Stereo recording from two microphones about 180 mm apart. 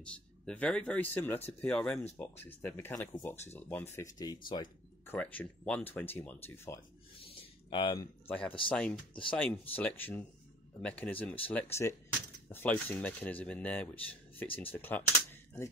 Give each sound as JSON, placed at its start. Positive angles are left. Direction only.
{"t": 0.0, "sound": "speech", "side_deg": 5}
{"t": 5.0, "sound": "speech", "side_deg": 10}
{"t": 8.6, "sound": "speech", "side_deg": 5}